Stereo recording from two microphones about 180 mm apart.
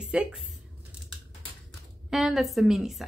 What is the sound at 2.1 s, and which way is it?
Speech, centre (ahead or behind).